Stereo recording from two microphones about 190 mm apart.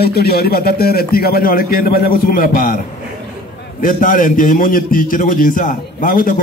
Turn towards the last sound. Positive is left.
turn(degrees=50)  # may be behind; listen again after turning